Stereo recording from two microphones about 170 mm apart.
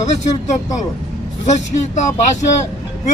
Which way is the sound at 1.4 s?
45° left (ahead or behind).